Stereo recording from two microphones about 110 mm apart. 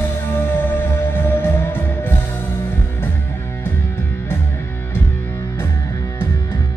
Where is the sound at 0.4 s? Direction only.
20° left (ahead or behind).